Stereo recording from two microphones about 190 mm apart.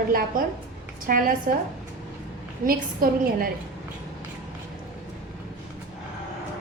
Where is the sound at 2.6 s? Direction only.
50° right (ahead or behind).